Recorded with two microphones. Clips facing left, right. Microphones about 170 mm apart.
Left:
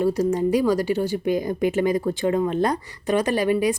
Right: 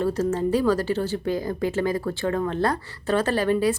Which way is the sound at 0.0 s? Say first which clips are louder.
Left 3 dB; 10° left (ahead or behind).